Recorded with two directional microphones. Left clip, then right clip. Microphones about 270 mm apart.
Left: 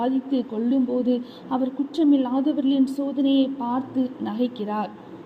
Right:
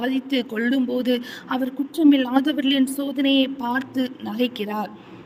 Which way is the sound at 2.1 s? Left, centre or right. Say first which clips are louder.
Right 2 dB; right.